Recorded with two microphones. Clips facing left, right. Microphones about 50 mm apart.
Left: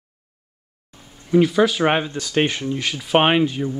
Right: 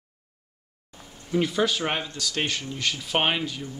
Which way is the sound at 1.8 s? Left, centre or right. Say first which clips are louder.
Left 9 dB; left.